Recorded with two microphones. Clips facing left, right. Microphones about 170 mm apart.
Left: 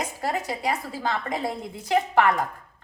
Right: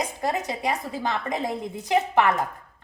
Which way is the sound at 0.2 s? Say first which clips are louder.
Left 1 dB; 15° right (ahead or behind).